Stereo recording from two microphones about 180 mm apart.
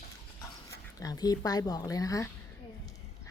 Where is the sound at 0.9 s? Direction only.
20° left (ahead or behind).